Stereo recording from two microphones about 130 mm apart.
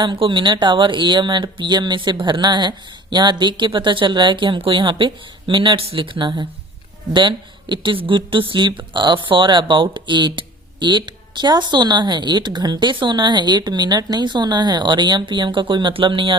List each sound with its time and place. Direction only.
0.0 s speech: 35° right (ahead or behind)